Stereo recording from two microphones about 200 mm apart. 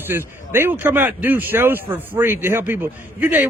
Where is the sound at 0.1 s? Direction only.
10° right (ahead or behind).